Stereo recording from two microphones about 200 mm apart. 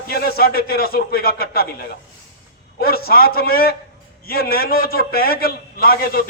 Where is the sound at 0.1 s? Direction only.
50° left (ahead or behind).